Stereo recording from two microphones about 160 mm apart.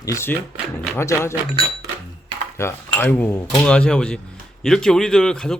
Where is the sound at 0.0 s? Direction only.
15° left (ahead or behind).